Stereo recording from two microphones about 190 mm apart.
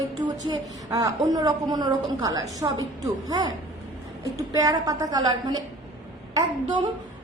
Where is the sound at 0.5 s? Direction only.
20° right (ahead or behind).